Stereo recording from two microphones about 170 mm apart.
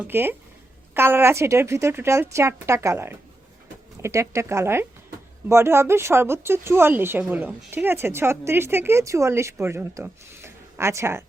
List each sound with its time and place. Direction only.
0.0 s speech: 10° right (ahead or behind)